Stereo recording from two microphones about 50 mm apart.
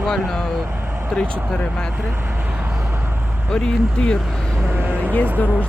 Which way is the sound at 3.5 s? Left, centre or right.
Centre.